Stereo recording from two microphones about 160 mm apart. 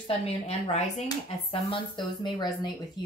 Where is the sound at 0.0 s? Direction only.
40° left (ahead or behind).